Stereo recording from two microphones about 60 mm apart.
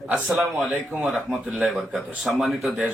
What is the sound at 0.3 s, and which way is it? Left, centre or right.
Speech, centre.